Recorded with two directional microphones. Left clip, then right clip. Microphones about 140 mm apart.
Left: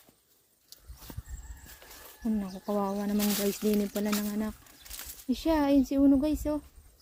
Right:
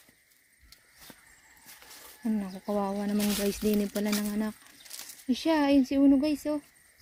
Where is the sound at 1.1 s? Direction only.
30° left (ahead or behind).